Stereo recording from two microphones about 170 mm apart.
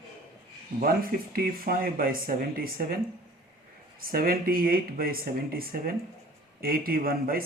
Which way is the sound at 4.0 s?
60° right (ahead or behind).